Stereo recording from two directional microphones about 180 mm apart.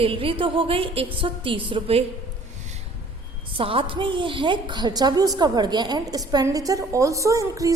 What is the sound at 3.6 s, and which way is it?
A woman's voice, 30° right (ahead or behind).